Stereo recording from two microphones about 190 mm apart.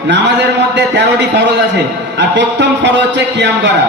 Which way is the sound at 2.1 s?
65° right (ahead or behind).